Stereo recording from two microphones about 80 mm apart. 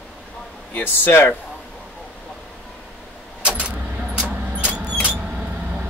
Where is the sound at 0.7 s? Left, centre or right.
Left.